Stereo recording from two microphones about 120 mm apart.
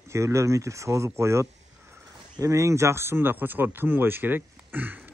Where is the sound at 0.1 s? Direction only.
25° right (ahead or behind).